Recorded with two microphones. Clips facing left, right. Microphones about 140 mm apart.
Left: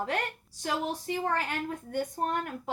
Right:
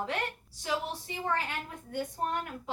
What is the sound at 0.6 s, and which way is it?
A woman's voice, 50° left (ahead or behind).